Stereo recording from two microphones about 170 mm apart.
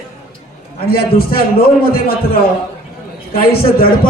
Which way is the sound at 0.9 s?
65° left (ahead or behind).